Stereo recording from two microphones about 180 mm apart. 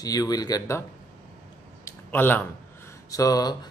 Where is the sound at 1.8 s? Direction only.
10° left (ahead or behind).